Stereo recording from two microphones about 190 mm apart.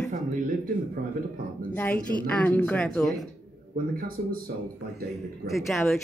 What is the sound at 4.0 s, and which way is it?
Speech, 50° right (ahead or behind).